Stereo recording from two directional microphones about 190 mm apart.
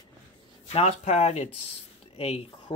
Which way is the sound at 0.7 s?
35° left (ahead or behind).